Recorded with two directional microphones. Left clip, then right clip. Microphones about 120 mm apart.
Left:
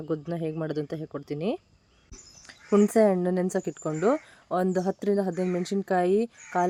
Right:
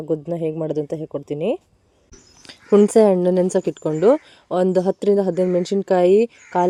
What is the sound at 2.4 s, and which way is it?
Speech, 25° right (ahead or behind).